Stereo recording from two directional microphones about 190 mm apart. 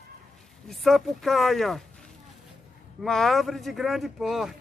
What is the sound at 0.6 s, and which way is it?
A man's voice, centre (ahead or behind).